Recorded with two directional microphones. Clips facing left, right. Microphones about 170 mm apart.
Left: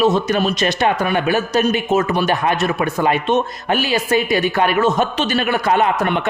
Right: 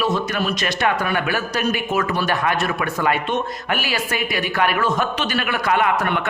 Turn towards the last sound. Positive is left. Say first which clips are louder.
# left 3 dB
turn(degrees=25)  # may be behind; listen again after turning